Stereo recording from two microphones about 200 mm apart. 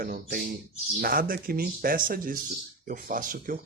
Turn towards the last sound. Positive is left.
turn(degrees=-45)  # may be behind; listen again after turning